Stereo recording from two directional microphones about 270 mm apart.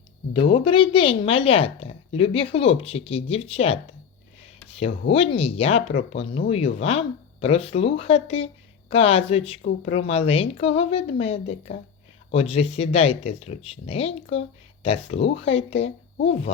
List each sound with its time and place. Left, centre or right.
0.3 s a woman's voice: centre
5.0 s a woman's voice: centre